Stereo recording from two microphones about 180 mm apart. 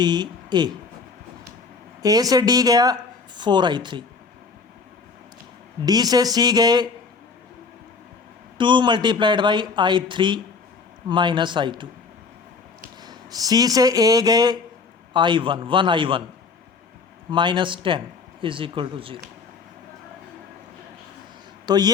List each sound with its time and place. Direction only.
0.0 s speech: 25° right (ahead or behind)
2.0 s speech: 20° right (ahead or behind)
5.8 s speech: 20° right (ahead or behind)
8.5 s speech: 25° right (ahead or behind)
13.0 s speech: 20° right (ahead or behind)
17.3 s speech: 25° right (ahead or behind)
21.7 s speech: 25° right (ahead or behind)